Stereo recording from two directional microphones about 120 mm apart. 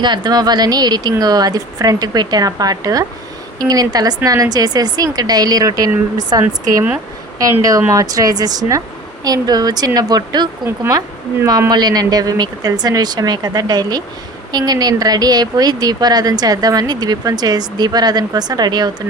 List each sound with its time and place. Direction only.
0.0 s speech: 35° right (ahead or behind)
7.6 s speech: 30° right (ahead or behind)
10.7 s speech: 25° right (ahead or behind)